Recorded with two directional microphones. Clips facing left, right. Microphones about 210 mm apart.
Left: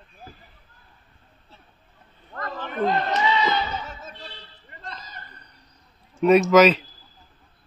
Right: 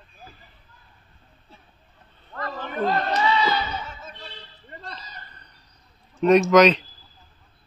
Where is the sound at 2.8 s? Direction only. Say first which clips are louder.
Even; 20° left (ahead or behind).